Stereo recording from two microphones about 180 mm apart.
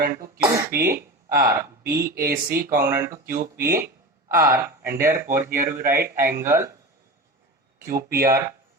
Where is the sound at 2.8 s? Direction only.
10° right (ahead or behind).